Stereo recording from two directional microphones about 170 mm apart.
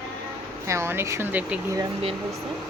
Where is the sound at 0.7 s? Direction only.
15° right (ahead or behind).